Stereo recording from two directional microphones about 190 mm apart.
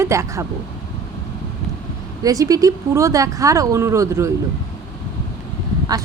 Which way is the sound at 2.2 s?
20° right (ahead or behind).